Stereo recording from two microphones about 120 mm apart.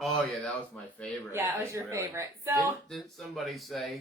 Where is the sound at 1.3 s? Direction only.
20° right (ahead or behind).